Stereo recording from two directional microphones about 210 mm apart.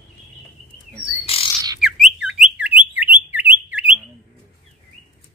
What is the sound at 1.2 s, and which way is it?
Bird, 25° left (ahead or behind).